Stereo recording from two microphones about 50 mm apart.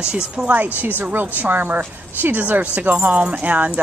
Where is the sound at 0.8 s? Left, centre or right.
Right.